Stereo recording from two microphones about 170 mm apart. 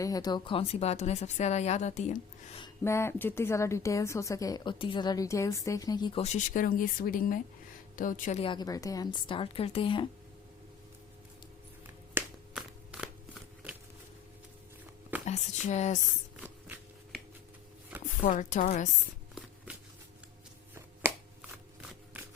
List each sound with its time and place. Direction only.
0.0 s speech: 20° left (ahead or behind); by 2.2 s 45° left (ahead or behind)
2.8 s speech: 15° left (ahead or behind)
6.1 s speech: 40° left (ahead or behind)
8.4 s a woman's voice: 25° left (ahead or behind)
12.2 s a sound: 15° right (ahead or behind)
15.2 s a sound: 40° left (ahead or behind)
16.4 s a sound: 10° right (ahead or behind)
18.0 s speech: 50° left (ahead or behind)
21.0 s shuffling cards: 15° right (ahead or behind)